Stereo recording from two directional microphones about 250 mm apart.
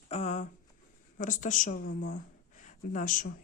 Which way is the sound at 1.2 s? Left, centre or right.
Left.